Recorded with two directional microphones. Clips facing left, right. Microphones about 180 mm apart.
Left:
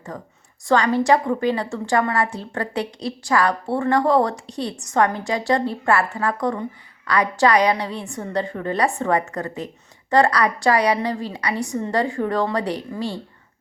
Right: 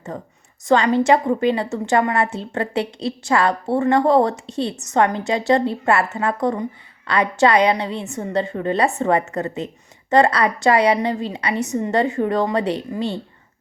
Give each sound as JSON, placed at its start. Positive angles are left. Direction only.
{"t": 0.1, "sound": "a woman's voice", "side_deg": -25}